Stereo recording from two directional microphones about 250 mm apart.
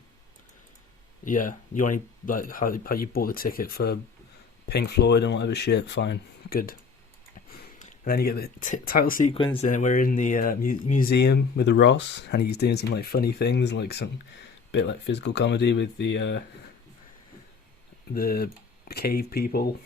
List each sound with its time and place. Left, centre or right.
1.2 s speech: left
9.4 s speech: centre
9.6 s speech: left
18.1 s speech: left